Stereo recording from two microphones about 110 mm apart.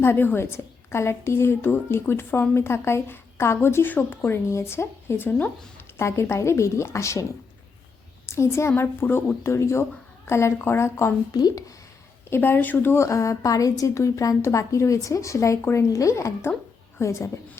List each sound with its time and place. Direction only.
0.0 s a woman's voice: 20° left (ahead or behind)
8.3 s a woman's voice: 25° left (ahead or behind)
11.3 s speech: 40° left (ahead or behind)
12.3 s a woman's voice: 20° left (ahead or behind)